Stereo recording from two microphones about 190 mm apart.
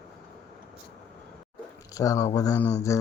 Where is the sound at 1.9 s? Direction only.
15° left (ahead or behind).